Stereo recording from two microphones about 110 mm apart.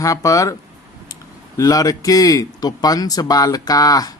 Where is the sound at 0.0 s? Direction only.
30° left (ahead or behind).